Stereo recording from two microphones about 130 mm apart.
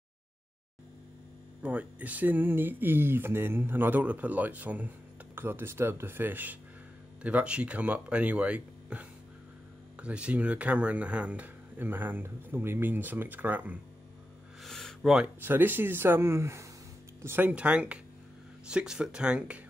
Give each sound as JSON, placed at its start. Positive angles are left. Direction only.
{"t": 1.6, "sound": "speech", "side_deg": -10}
{"t": 14.6, "sound": "a sound", "side_deg": 5}
{"t": 15.4, "sound": "speech", "side_deg": -15}